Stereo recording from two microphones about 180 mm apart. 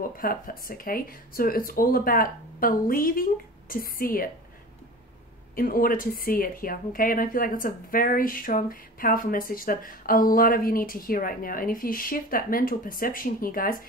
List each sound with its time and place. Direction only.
0.2 s speech: 50° left (ahead or behind)
5.6 s speech: 55° left (ahead or behind)